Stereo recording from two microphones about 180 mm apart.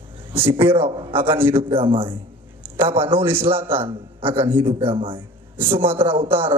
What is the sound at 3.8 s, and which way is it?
Speech, 30° right (ahead or behind).